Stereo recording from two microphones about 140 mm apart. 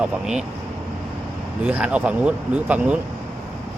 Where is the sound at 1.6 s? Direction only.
10° right (ahead or behind).